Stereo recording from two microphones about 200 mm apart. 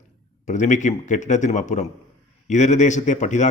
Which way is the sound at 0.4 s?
35° left (ahead or behind).